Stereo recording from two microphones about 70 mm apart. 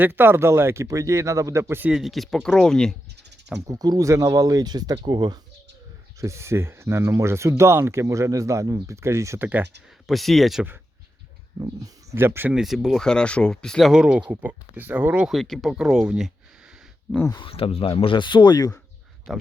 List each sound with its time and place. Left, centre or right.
0.0 s speech: right
0.9 s speech: right
1.9 s speech: centre
3.7 s speech: right
6.1 s speech: right
10.1 s speech: centre
12.1 s speech: right
12.5 s speech: centre
13.0 s speech: centre
13.9 s speech: centre
15.3 s speech: centre
15.7 s speech: centre
18.2 s speech: left
19.3 s speech: centre